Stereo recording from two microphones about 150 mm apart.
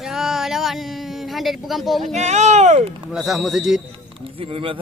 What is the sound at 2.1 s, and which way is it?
Speech, 50° right (ahead or behind).